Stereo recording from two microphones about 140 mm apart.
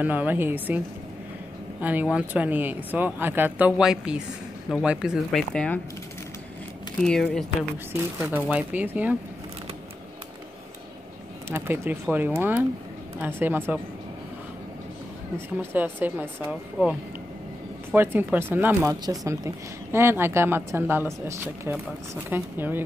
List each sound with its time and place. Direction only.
0.0 s speech: 10° right (ahead or behind); by 5.8 s 5° left (ahead or behind)
7.0 s speech: centre (ahead or behind)
8.3 s speech: 10° right (ahead or behind)
11.4 s speech: 15° right (ahead or behind)
15.6 s speech: 15° right (ahead or behind)